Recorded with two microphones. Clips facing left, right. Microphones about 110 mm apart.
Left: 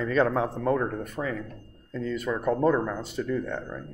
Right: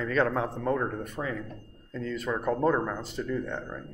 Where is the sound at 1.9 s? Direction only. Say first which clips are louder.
Left 2 dB; 10° left (ahead or behind).